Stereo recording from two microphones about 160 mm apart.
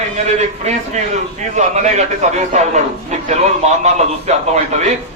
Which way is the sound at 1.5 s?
45° right (ahead or behind).